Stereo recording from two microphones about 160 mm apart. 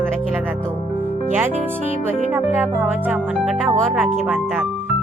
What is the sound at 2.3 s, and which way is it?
Speech, 10° right (ahead or behind).